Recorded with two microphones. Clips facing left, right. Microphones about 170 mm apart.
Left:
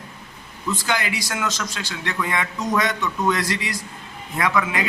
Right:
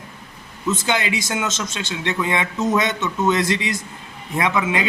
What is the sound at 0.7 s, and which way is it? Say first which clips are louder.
A man's voice: right 3 dB; 25° right (ahead or behind).